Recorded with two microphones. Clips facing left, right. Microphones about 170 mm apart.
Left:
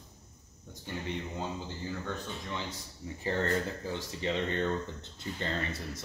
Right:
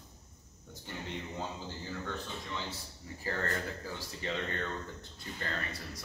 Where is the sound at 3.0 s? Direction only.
20° left (ahead or behind).